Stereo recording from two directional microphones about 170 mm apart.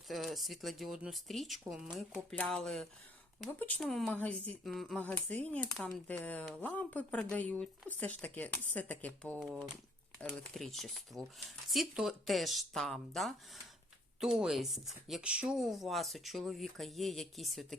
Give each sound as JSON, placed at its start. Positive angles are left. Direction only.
{"t": 0.1, "sound": "speech", "side_deg": 0}